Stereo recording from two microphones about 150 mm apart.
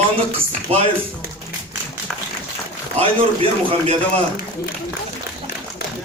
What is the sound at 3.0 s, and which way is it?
Speech, 35° right (ahead or behind).